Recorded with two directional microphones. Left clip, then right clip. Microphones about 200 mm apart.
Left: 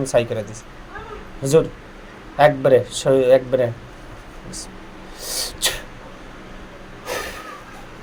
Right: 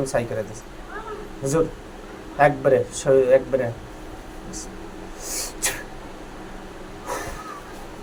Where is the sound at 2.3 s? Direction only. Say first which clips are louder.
Left 4 dB; 40° left (ahead or behind).